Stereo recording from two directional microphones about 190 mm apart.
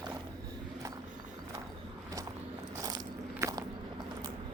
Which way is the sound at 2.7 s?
20° right (ahead or behind).